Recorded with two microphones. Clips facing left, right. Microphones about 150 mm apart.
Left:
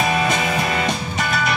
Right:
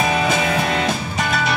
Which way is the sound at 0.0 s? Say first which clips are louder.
Right 1 dB; centre (ahead or behind).